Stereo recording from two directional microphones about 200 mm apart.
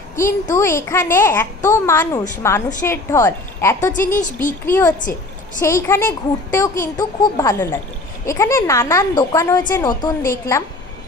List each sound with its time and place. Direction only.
0.6 s a woman's voice: 15° left (ahead or behind)
4.2 s speech: 40° left (ahead or behind)
4.6 s a woman's voice: 10° left (ahead or behind)